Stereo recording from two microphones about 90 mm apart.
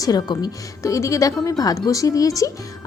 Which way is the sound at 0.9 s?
35° left (ahead or behind).